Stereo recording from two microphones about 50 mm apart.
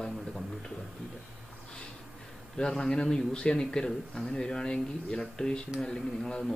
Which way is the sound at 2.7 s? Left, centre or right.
Centre.